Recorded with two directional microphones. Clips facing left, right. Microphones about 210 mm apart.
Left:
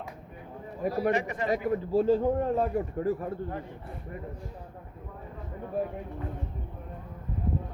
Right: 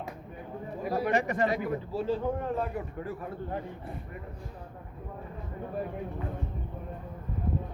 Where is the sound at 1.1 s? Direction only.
40° right (ahead or behind).